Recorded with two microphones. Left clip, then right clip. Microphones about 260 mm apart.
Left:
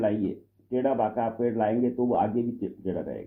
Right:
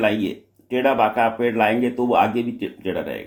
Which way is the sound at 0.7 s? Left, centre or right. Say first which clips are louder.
Right 8 dB; right.